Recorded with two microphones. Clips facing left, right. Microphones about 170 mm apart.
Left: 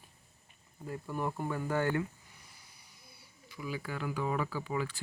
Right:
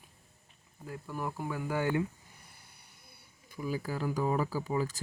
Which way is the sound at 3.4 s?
40° right (ahead or behind).